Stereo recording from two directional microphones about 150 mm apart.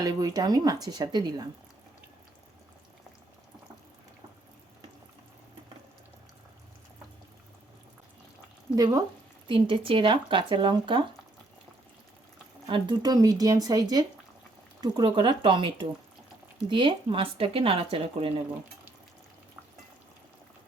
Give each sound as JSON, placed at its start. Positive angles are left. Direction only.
{"t": 0.0, "sound": "speech", "side_deg": -25}
{"t": 8.7, "sound": "speech", "side_deg": -25}
{"t": 9.5, "sound": "speech", "side_deg": -35}
{"t": 12.6, "sound": "speech", "side_deg": -30}